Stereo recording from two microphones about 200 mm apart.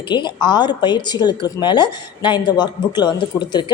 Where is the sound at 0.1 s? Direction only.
20° left (ahead or behind).